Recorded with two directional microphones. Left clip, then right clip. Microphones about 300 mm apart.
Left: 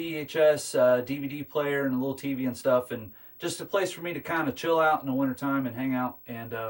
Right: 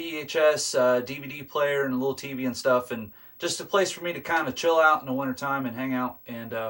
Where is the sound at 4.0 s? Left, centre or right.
Centre.